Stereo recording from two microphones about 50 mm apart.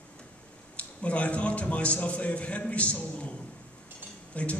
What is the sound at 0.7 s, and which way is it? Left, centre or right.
A man's voice, left.